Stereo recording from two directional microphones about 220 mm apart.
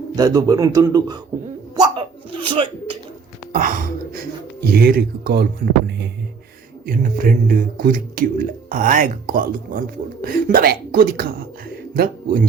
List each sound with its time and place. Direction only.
0.2 s speech: 15° right (ahead or behind)
1.7 s hiccup: 20° right (ahead or behind)
3.5 s speech: 40° right (ahead or behind)
6.8 s speech: 40° right (ahead or behind)